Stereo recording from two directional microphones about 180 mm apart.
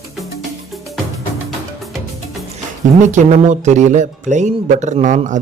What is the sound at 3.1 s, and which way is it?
Speech, 40° right (ahead or behind).